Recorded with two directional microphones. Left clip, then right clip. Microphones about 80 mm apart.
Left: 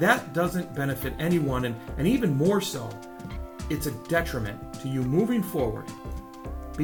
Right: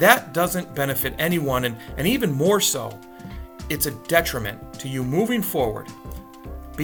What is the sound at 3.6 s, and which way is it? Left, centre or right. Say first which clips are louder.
Speech: right 4 dB; right.